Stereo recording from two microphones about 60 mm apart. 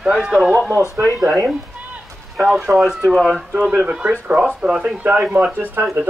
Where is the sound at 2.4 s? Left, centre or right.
Centre.